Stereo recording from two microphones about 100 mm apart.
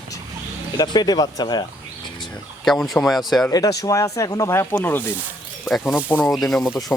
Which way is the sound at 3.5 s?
35° left (ahead or behind).